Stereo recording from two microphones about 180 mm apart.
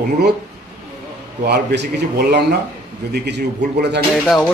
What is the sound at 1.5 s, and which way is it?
Speech, 60° right (ahead or behind).